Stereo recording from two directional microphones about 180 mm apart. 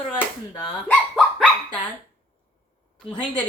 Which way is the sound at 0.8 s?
5° left (ahead or behind).